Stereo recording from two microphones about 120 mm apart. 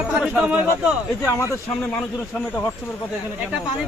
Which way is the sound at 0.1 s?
10° right (ahead or behind).